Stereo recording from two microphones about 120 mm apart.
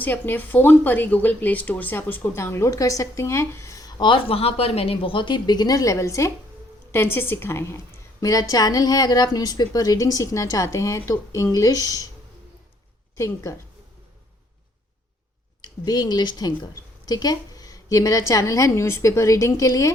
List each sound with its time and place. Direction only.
0.0 s speech: 15° left (ahead or behind)
13.1 s speech: 25° left (ahead or behind)
15.6 s speech: 35° left (ahead or behind)